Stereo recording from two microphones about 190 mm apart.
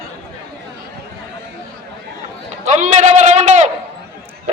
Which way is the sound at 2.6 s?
40° right (ahead or behind).